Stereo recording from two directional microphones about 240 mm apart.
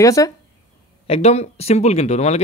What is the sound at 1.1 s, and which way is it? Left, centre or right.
Speech, left.